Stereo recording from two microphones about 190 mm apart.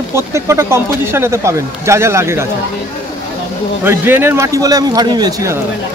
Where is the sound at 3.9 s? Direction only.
10° right (ahead or behind).